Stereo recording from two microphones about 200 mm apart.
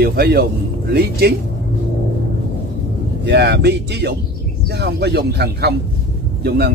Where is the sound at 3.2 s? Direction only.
55° right (ahead or behind).